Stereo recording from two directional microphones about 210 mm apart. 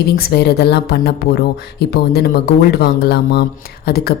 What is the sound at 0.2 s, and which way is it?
A woman's voice, 50° left (ahead or behind).